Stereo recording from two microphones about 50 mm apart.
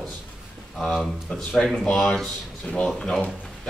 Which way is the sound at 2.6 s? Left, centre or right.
Left.